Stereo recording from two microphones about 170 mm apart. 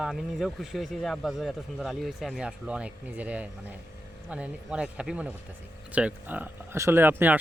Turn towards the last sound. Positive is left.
turn(degrees=-10)  # may be behind; listen again after turning